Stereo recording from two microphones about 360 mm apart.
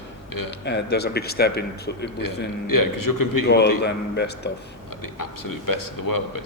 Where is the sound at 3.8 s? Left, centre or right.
Left.